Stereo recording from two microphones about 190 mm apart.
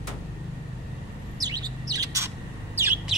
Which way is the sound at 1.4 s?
20° right (ahead or behind).